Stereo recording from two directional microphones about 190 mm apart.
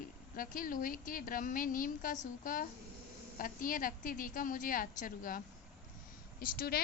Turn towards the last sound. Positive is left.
turn(degrees=50)  # may be behind; listen again after turning